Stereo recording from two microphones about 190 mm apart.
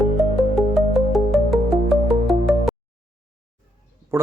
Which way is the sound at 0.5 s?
Centre (ahead or behind).